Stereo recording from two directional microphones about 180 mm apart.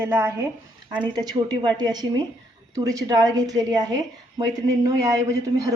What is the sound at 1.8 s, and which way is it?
A woman's voice, 25° right (ahead or behind).